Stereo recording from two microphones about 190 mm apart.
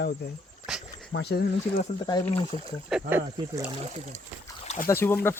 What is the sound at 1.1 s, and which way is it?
Speech, 60° left (ahead or behind).